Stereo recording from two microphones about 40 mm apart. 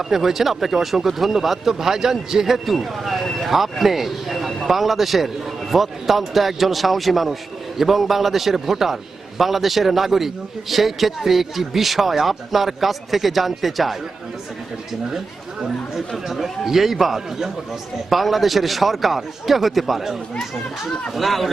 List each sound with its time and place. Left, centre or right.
0.0 s a man's voice: centre
16.0 s a man's voice: centre